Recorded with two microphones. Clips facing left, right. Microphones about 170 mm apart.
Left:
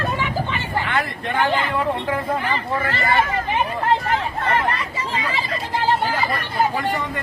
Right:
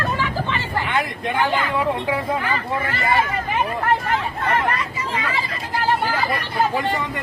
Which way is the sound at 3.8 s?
30° left (ahead or behind).